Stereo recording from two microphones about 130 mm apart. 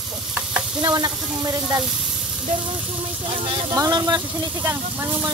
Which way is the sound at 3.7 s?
30° right (ahead or behind).